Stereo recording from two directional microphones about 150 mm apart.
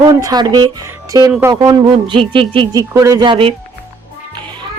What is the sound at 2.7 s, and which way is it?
Speech, 20° right (ahead or behind).